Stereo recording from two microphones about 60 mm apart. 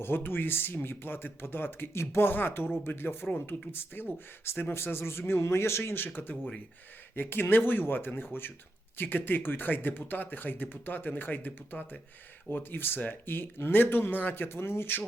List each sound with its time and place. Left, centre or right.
0.0 s speech: left
7.2 s speech: left